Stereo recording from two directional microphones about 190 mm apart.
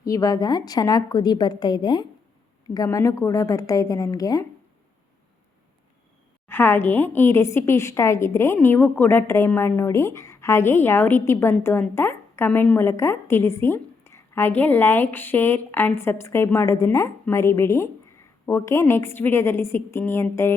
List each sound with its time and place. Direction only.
0.0 s a woman's voice: 20° left (ahead or behind)
6.5 s a woman's voice: 10° left (ahead or behind)